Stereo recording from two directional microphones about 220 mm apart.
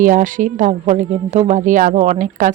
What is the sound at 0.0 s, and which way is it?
Speech, 35° right (ahead or behind).